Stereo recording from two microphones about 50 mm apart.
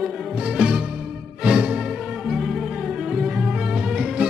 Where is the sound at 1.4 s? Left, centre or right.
Right.